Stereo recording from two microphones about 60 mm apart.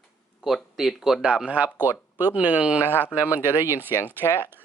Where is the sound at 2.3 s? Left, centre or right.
Right.